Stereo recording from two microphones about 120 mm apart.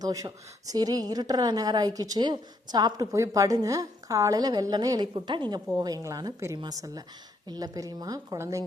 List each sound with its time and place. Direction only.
0.0 s a woman's voice: 30° right (ahead or behind)